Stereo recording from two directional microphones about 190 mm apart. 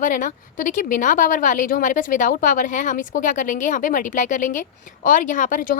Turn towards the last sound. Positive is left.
turn(degrees=45)  # may be behind; listen again after turning